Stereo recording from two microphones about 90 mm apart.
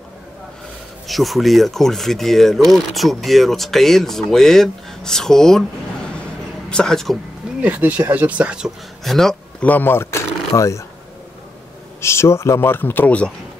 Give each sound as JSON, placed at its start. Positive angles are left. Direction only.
{"t": 1.0, "sound": "speech", "side_deg": 0}
{"t": 6.7, "sound": "speech", "side_deg": 5}
{"t": 7.6, "sound": "speech", "side_deg": -15}
{"t": 9.7, "sound": "speech", "side_deg": 25}
{"t": 10.5, "sound": "speech", "side_deg": 35}
{"t": 12.0, "sound": "speech", "side_deg": 30}